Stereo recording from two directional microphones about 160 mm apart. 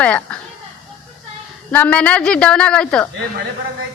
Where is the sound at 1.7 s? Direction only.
10° left (ahead or behind).